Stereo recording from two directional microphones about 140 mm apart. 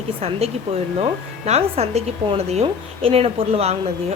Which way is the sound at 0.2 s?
45° right (ahead or behind).